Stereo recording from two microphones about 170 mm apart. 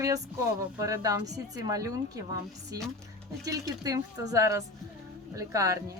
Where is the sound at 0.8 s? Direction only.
20° right (ahead or behind).